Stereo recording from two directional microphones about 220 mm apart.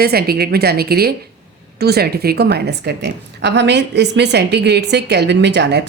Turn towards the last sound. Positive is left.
turn(degrees=-50)  # may be behind; listen again after turning